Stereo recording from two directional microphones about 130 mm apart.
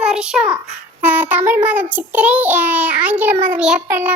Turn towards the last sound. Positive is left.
turn(degrees=-10)  # may be behind; listen again after turning